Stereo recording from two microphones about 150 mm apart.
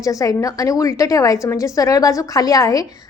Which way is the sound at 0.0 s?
20° left (ahead or behind).